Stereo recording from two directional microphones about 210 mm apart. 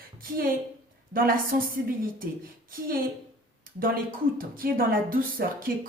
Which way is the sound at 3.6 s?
45° right (ahead or behind).